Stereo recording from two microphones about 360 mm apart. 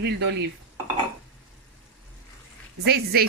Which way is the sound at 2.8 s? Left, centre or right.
Right.